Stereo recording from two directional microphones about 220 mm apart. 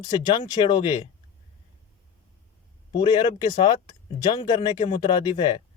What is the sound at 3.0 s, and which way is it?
A man's voice, 20° left (ahead or behind).